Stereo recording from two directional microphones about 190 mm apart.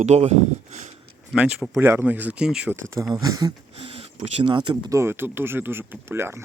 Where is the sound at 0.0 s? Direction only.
35° right (ahead or behind).